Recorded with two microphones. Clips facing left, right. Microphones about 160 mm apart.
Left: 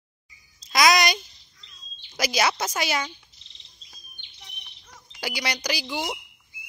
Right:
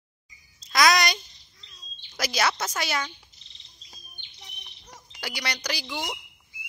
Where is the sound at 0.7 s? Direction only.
15° left (ahead or behind).